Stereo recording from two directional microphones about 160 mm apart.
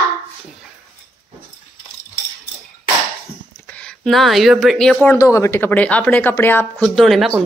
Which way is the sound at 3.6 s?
5° left (ahead or behind).